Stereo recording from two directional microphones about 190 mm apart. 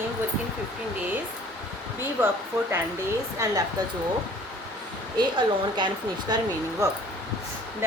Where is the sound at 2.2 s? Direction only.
10° right (ahead or behind).